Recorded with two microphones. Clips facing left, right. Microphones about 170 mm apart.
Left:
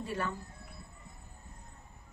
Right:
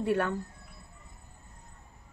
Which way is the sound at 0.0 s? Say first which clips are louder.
Right 8 dB; 60° right (ahead or behind).